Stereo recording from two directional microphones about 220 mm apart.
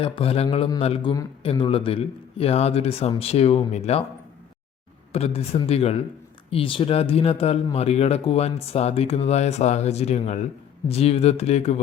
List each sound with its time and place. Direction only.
0.0 s speech: 25° left (ahead or behind)
5.1 s speech: 30° left (ahead or behind)